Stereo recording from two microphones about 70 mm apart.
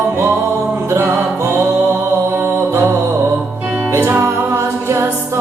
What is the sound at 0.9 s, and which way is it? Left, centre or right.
Music, right.